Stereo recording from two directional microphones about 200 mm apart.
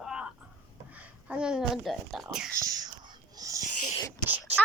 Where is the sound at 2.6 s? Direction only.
20° right (ahead or behind).